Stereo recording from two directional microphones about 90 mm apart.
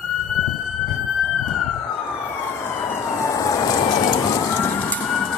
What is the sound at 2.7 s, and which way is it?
Emergency vehicle, 25° left (ahead or behind).